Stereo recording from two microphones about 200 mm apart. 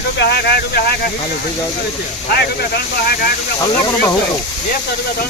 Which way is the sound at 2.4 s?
55° left (ahead or behind).